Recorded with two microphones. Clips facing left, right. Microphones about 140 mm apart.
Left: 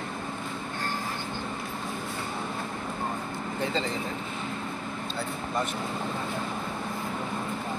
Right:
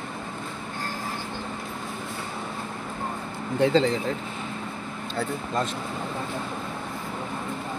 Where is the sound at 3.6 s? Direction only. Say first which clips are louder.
Right 10 dB; 85° right.